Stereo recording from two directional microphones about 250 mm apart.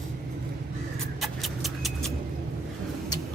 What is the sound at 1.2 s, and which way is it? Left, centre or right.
Vehicle, centre.